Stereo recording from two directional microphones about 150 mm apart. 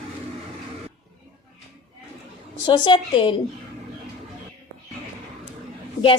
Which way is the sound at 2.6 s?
30° left (ahead or behind).